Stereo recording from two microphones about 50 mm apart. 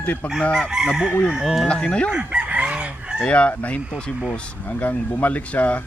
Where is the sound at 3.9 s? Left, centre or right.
Centre.